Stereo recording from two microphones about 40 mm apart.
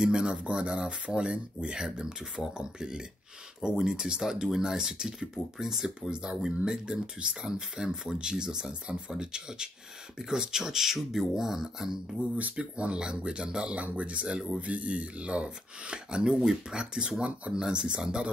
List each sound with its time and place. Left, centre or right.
0.0 s speech: centre
6.0 s speech: right
12.5 s speech: right
13.7 s speech: right